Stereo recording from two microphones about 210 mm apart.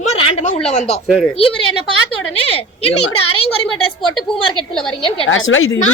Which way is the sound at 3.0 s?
90° left.